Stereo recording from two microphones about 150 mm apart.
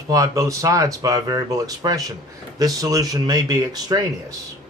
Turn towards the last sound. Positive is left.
turn(degrees=-25)  # may be behind; listen again after turning